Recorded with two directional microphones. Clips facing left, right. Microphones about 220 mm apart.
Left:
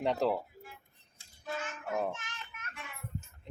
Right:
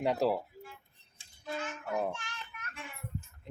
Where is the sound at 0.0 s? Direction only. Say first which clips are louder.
Right 1 dB; 5° right (ahead or behind).